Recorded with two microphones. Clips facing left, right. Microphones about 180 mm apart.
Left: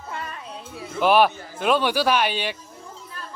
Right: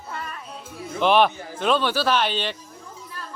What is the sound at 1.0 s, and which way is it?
Speech, 5° left (ahead or behind).